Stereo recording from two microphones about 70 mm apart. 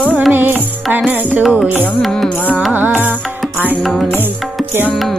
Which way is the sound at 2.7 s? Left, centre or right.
Right.